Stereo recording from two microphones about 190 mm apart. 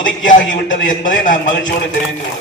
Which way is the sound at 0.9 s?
45° left (ahead or behind).